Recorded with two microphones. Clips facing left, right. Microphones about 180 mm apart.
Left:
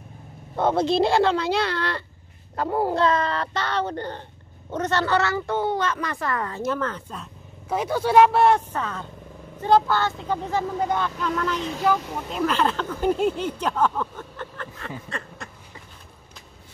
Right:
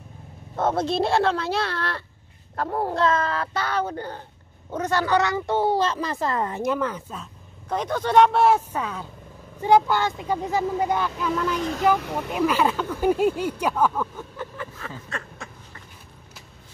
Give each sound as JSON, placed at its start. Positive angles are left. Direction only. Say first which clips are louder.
{"t": 0.6, "sound": "a woman's voice", "louder": "left 2 dB", "side_deg": 0}
{"t": 7.6, "sound": "a woman's voice", "louder": "left 2 dB", "side_deg": 5}
{"t": 15.0, "sound": "a sound", "louder": "even", "side_deg": 0}